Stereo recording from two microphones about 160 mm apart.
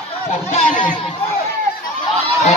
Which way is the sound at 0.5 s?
45° left (ahead or behind).